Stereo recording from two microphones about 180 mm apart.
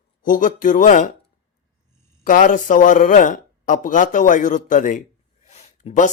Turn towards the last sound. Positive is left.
turn(degrees=40)  # may be behind; listen again after turning